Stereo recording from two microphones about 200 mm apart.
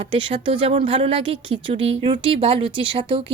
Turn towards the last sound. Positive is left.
turn(degrees=-25)  # may be behind; listen again after turning